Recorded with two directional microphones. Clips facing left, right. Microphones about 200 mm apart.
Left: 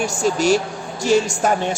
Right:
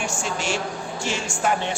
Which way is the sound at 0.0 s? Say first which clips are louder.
Left 9 dB; 40° left (ahead or behind).